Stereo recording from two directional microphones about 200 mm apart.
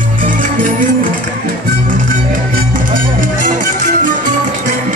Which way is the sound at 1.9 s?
40° right (ahead or behind).